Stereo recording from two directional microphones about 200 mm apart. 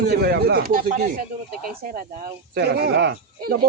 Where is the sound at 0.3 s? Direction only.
50° right (ahead or behind).